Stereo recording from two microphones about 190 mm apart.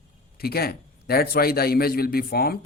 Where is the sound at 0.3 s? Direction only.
55° left (ahead or behind).